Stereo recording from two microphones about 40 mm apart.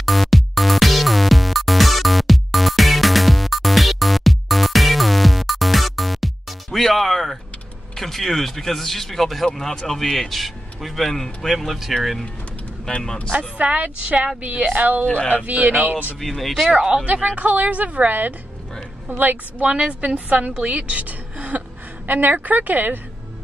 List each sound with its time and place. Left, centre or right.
0.0 s music: centre
8.0 s speech: centre
11.6 s speech: centre
13.6 s a woman's voice: right
15.0 s speech: left
15.4 s speech: right
16.2 s speech: centre
16.7 s a woman's voice: centre
17.0 s a woman's voice: right
19.6 s a woman's voice: right